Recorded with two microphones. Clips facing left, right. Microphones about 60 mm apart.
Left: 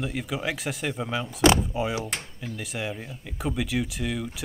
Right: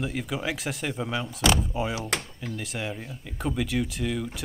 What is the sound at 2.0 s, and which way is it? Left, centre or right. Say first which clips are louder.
Speech: right 3 dB; right.